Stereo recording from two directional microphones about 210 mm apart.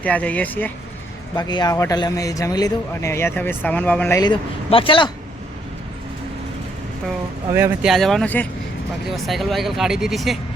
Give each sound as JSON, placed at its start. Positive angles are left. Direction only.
{"t": 0.0, "sound": "speech", "side_deg": 5}
{"t": 1.4, "sound": "speech", "side_deg": 20}
{"t": 4.2, "sound": "speech", "side_deg": 25}
{"t": 7.5, "sound": "speech", "side_deg": -5}